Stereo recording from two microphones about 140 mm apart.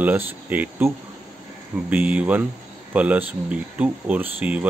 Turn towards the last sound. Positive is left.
turn(degrees=-10)  # may be behind; listen again after turning